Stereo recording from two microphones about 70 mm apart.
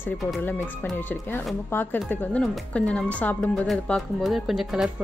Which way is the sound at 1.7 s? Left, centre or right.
Left.